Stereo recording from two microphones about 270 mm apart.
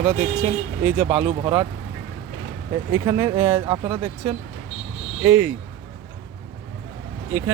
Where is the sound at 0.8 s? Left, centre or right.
Centre.